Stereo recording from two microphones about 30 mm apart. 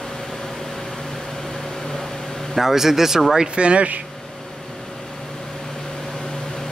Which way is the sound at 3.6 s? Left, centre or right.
Right.